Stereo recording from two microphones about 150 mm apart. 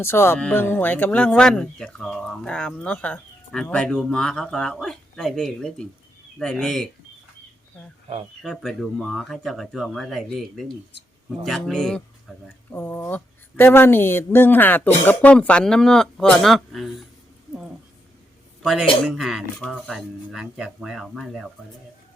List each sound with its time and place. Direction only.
0.0 s speech: 15° left (ahead or behind)
8.4 s speech: centre (ahead or behind)
18.6 s speech: centre (ahead or behind)
20.3 s speech: 5° right (ahead or behind)